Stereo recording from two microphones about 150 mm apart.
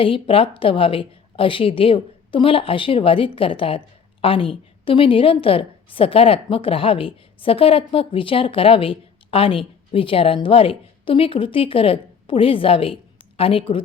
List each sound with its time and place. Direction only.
0.0 s speech: 35° left (ahead or behind)